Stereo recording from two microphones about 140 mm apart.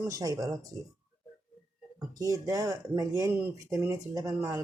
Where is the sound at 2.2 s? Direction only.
25° right (ahead or behind).